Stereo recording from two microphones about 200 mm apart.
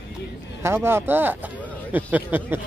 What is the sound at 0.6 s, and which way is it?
Speech, 10° right (ahead or behind).